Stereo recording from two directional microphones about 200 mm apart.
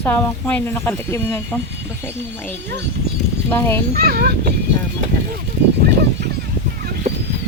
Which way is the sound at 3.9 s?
50° right (ahead or behind).